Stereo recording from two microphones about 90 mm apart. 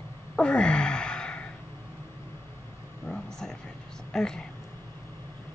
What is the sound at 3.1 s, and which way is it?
Vehicle, 5° left (ahead or behind).